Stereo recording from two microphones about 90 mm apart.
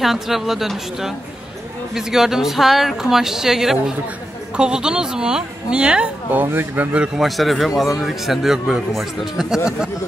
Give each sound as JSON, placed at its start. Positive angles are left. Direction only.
{"t": 0.0, "sound": "a man's voice", "side_deg": -5}
{"t": 6.4, "sound": "speech", "side_deg": -25}
{"t": 7.2, "sound": "a man's voice", "side_deg": 0}